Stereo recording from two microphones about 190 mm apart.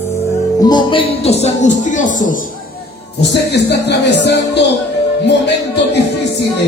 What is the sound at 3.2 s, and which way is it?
Speech, 65° left (ahead or behind).